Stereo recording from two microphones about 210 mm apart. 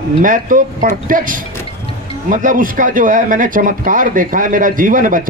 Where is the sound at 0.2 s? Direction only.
40° right (ahead or behind).